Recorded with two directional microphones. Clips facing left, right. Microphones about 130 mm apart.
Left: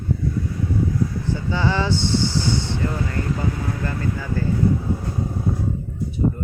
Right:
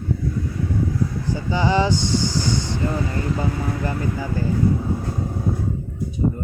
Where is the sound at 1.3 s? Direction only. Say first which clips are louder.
Right 4 dB; 15° right (ahead or behind).